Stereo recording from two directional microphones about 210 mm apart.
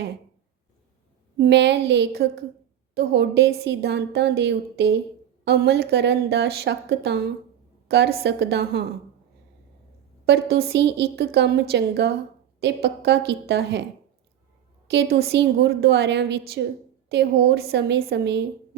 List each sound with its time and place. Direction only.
1.4 s a woman's voice: 55° right (ahead or behind)
10.2 s a woman's voice: 50° right (ahead or behind)
14.8 s a woman's voice: 50° right (ahead or behind)